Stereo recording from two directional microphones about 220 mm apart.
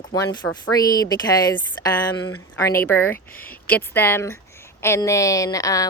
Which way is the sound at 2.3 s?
10° left (ahead or behind).